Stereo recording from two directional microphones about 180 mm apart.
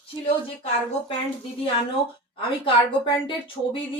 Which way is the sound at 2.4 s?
30° left (ahead or behind).